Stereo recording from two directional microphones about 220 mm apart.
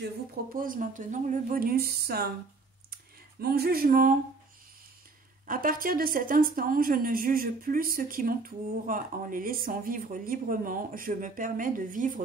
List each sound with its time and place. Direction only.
0.0 s a woman's voice: 40° right (ahead or behind)
3.3 s speech: 45° right (ahead or behind)
5.5 s a woman's voice: 40° right (ahead or behind)